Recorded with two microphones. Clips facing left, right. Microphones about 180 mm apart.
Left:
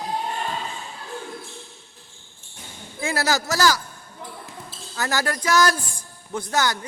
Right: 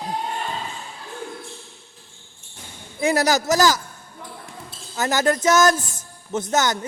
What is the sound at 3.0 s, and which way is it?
Speech, 20° right (ahead or behind).